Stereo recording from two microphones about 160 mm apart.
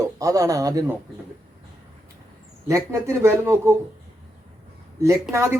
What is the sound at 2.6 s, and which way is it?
A man's voice, 20° right (ahead or behind).